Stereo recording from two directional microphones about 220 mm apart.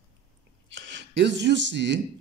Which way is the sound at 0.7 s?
55° right (ahead or behind).